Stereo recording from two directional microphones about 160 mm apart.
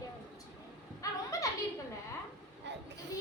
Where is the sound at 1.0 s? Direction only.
20° left (ahead or behind).